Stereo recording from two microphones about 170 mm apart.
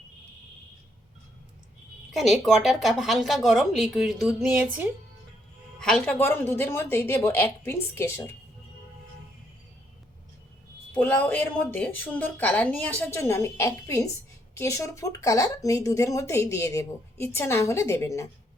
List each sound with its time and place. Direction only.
2.1 s a woman's voice: centre (ahead or behind)
5.8 s speech: 5° left (ahead or behind)
10.9 s speech: 10° left (ahead or behind)